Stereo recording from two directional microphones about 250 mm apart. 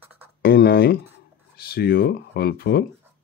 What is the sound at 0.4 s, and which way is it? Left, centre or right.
Speech, left.